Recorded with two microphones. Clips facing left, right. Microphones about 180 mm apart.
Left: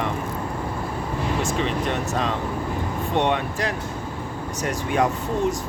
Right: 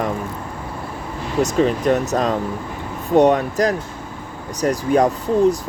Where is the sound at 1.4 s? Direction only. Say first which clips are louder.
Right 12 dB; 40° right (ahead or behind).